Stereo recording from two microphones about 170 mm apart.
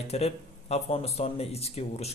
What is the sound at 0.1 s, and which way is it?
A man's voice, 40° left (ahead or behind).